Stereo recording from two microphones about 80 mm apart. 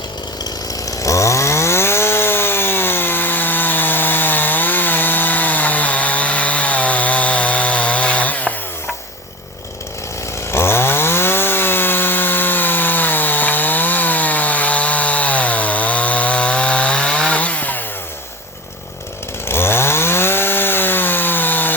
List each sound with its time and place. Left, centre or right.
0.9 s chainsaw: left; by 8.5 s centre
10.5 s chainsaw: left
19.5 s chainsaw: left